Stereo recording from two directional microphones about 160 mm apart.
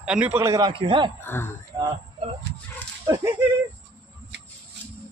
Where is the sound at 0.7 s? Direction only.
35° right (ahead or behind).